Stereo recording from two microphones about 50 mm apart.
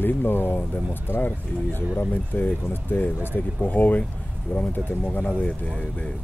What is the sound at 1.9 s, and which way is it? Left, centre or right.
Speech, left.